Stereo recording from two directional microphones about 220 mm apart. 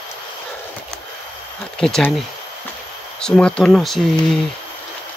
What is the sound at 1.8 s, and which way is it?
Speech, centre (ahead or behind).